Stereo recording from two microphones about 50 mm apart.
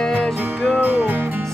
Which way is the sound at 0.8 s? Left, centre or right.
Right.